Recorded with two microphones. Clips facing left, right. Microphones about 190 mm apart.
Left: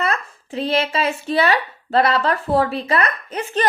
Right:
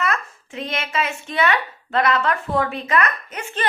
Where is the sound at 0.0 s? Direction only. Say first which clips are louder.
Left 2 dB; 35° left (ahead or behind).